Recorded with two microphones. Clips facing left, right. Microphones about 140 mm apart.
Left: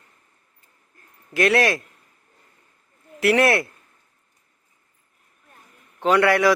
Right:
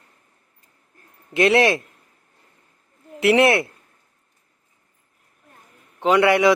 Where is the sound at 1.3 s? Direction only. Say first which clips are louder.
Right 3 dB; 25° right (ahead or behind).